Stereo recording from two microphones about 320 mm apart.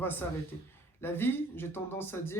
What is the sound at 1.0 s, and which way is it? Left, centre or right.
Speech, centre.